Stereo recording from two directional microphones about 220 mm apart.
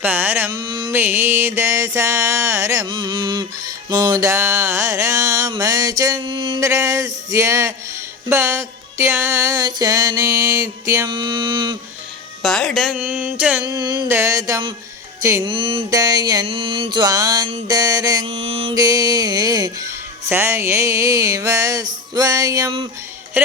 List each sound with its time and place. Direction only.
0.0 s music: 10° right (ahead or behind)
0.6 s mantra: 20° right (ahead or behind)
0.9 s music: 10° right (ahead or behind)
12.4 s speech: centre (ahead or behind)
13.7 s music: 20° right (ahead or behind)